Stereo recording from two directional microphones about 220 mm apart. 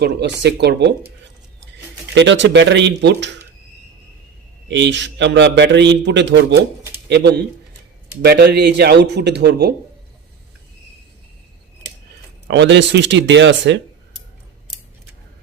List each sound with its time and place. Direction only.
0.0 s a man's voice: 50° right (ahead or behind)
2.1 s a man's voice: 55° right (ahead or behind)
4.7 s a man's voice: 55° right (ahead or behind)
6.9 s pigeon: 50° right (ahead or behind)
8.2 s a man's voice: 50° right (ahead or behind)
12.5 s a man's voice: 50° right (ahead or behind)